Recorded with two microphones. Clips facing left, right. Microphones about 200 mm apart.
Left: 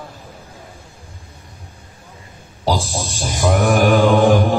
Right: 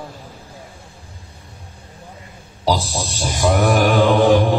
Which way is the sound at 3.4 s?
50° left (ahead or behind).